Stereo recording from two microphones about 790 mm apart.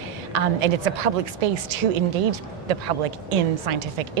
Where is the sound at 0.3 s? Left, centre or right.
Right.